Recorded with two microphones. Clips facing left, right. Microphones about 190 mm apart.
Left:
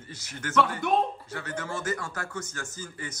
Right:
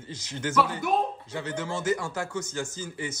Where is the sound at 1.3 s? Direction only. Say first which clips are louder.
Right 3 dB; 15° right (ahead or behind).